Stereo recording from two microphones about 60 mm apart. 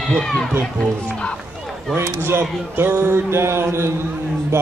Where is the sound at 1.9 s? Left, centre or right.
Right.